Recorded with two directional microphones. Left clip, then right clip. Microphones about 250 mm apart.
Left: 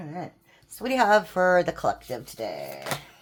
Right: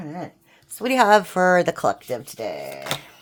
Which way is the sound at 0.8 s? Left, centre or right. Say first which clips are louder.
Right 5 dB; right.